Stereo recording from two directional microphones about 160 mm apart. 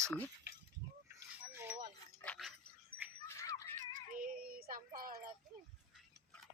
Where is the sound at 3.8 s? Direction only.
65° right (ahead or behind).